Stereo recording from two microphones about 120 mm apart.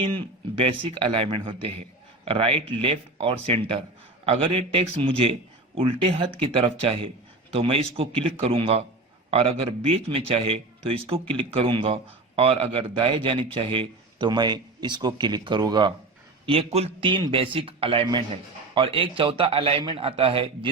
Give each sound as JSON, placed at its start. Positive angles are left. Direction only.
{"t": 0.0, "sound": "a man's voice", "side_deg": -45}
{"t": 16.7, "sound": "speech", "side_deg": -50}